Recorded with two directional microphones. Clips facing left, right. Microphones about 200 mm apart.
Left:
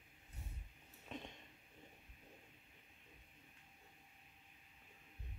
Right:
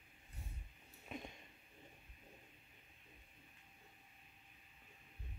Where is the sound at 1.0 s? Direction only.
10° right (ahead or behind).